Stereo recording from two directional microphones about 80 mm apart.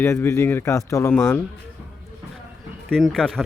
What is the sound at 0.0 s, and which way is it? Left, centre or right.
Speech, left.